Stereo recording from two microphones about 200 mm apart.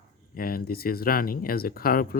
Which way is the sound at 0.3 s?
45° left (ahead or behind).